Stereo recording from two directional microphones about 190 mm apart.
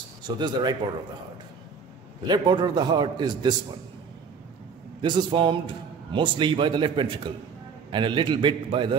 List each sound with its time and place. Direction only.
0.4 s a man's voice: 20° right (ahead or behind)
2.2 s a man's voice: 20° right (ahead or behind)
5.0 s a man's voice: 25° right (ahead or behind)